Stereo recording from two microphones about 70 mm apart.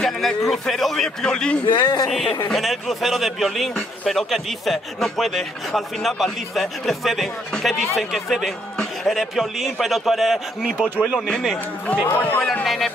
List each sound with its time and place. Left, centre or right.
0.0 s a sound: centre
0.5 s a man's voice: centre
1.7 s speech: left
2.0 s a man's voice: centre
10.8 s speech: right
11.1 s a man's voice: centre
11.9 s speech: left
12.6 s a man's voice: centre